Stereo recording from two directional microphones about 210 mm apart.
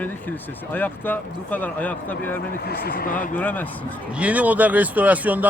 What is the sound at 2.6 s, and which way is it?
Speech, 45° left (ahead or behind).